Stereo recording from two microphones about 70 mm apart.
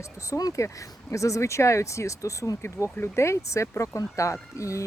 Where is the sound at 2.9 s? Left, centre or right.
Left.